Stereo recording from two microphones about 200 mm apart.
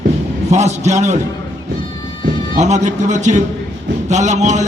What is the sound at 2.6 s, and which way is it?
Speech, 35° right (ahead or behind).